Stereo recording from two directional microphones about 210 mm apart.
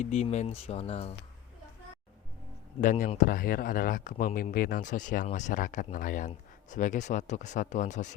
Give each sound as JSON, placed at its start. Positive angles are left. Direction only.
{"t": 0.0, "sound": "speech", "side_deg": 35}
{"t": 2.8, "sound": "speech", "side_deg": 35}